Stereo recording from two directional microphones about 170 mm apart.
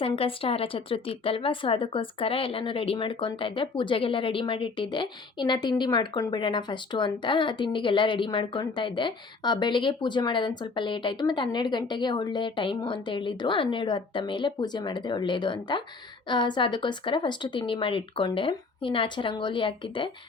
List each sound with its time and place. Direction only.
0.0 s a woman's voice: 35° left (ahead or behind)